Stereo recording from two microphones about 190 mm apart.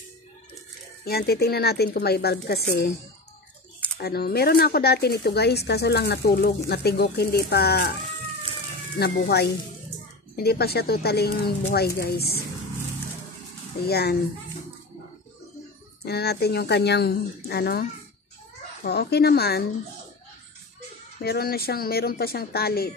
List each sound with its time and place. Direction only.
1.0 s speech: 55° left (ahead or behind)
4.0 s speech: 55° left (ahead or behind)
10.3 s speech: 55° left (ahead or behind)
13.8 s speech: 55° left (ahead or behind)
16.0 s speech: 60° left (ahead or behind)
18.9 s speech: 60° left (ahead or behind)
21.2 s speech: 55° left (ahead or behind)